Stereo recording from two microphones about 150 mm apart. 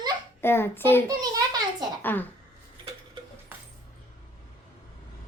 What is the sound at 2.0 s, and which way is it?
Speech, 10° left (ahead or behind).